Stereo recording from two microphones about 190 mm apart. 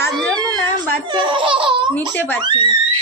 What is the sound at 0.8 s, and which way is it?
A child's voice, 25° right (ahead or behind).